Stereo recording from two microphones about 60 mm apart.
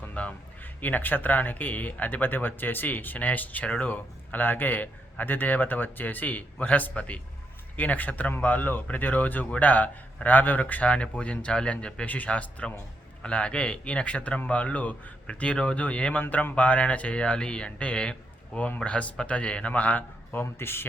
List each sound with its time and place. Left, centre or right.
0.0 s speech: left
20.3 s speech: left